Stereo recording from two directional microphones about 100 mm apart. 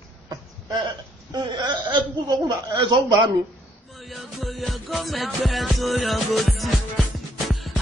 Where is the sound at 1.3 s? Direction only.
50° right (ahead or behind).